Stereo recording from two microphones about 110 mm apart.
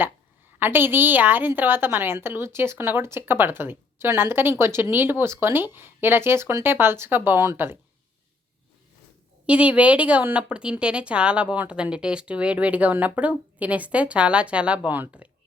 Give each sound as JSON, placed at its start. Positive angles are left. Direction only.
{"t": 0.6, "sound": "a woman's voice", "side_deg": -20}
{"t": 9.5, "sound": "speech", "side_deg": -10}